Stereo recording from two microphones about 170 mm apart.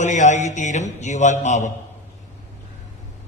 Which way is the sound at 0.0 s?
45° left (ahead or behind).